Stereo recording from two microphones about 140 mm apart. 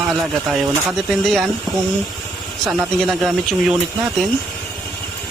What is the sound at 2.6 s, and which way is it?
Speech, centre (ahead or behind).